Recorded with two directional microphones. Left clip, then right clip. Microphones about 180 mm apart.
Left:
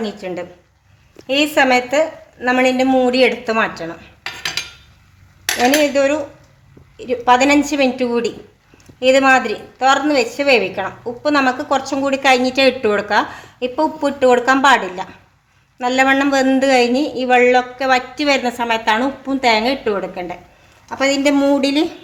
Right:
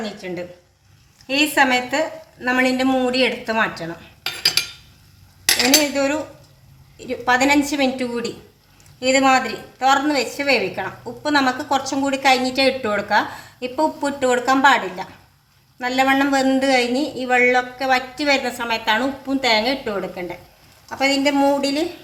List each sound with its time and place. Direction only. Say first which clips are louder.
0.0 s a woman's voice: left 4 dB; 55° left (ahead or behind)
5.9 s a woman's voice: left 5 dB; 50° left (ahead or behind)